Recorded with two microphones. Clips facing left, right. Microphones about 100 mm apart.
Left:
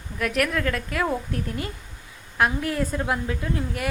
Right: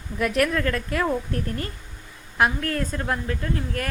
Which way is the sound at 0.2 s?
Centre (ahead or behind).